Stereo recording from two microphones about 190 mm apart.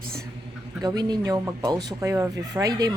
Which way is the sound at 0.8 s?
20° right (ahead or behind).